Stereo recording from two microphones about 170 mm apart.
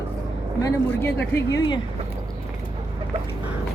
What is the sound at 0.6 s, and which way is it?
Speech, 20° left (ahead or behind).